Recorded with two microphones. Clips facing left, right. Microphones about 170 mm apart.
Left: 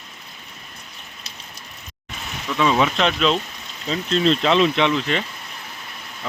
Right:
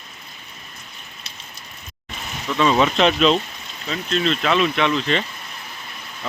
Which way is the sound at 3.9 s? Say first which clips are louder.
Left 3 dB; 30° left (ahead or behind).